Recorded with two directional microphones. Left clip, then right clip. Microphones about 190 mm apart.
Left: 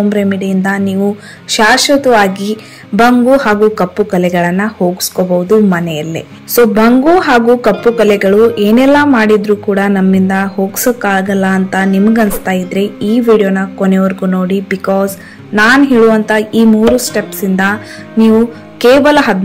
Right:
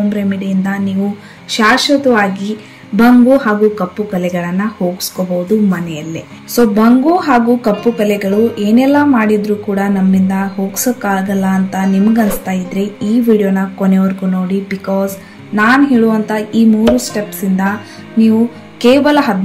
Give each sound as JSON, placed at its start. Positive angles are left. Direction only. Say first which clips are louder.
{"t": 0.1, "sound": "a woman's voice", "louder": "left 5 dB", "side_deg": 20}
{"t": 18.8, "sound": "speech", "louder": "left 3 dB", "side_deg": 15}